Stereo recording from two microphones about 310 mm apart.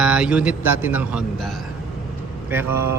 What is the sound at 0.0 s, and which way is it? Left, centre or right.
Speech, centre.